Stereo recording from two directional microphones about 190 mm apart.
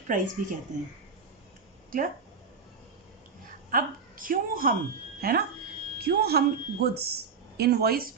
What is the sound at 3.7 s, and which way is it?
A woman's voice, 45° right (ahead or behind).